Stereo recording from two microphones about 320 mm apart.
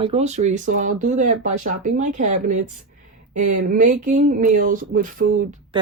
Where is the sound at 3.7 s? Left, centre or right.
Right.